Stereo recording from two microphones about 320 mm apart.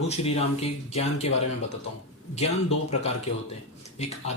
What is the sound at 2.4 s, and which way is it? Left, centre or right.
Speech, centre.